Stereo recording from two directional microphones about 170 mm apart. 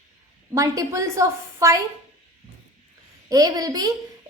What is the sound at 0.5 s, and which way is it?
A woman's voice, 20° right (ahead or behind).